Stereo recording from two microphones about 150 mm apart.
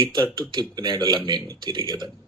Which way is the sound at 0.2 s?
30° right (ahead or behind).